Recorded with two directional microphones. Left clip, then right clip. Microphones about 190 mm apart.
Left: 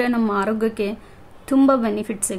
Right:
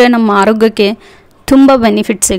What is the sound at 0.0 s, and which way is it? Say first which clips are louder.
Speech: right 13 dB; 50° right (ahead or behind).